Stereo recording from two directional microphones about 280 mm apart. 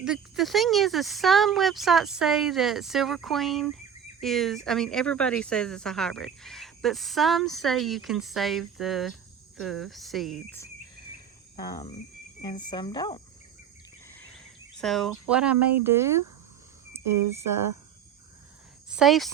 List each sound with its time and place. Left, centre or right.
0.0 s speech: centre
11.5 s speech: centre
14.1 s cricket: centre
15.8 s speech: centre
16.9 s cricket: centre
18.9 s speech: centre